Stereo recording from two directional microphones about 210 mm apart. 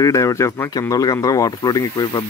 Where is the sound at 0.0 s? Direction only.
15° left (ahead or behind).